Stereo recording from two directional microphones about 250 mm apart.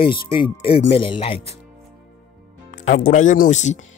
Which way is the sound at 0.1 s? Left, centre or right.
Centre.